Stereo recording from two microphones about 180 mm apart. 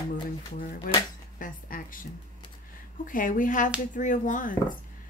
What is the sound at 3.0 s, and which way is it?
Speech, 50° left (ahead or behind).